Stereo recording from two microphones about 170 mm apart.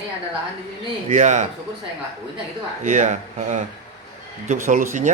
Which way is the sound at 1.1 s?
45° right (ahead or behind).